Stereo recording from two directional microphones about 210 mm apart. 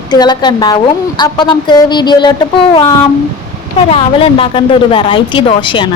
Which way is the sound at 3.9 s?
25° left (ahead or behind).